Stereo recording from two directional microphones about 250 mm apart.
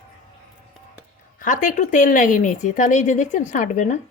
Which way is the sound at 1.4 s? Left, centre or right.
Left.